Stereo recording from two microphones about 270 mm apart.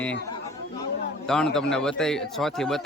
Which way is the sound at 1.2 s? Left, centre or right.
Centre.